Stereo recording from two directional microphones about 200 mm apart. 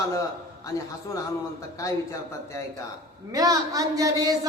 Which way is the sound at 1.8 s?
15° left (ahead or behind).